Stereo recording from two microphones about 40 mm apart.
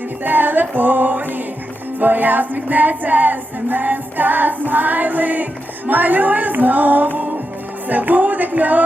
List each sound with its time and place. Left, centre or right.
0.3 s music: right